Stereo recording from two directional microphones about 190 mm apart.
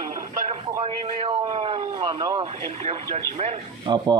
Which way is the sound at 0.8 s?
30° right (ahead or behind).